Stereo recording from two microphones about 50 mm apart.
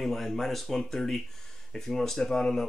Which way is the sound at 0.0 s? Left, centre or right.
Centre.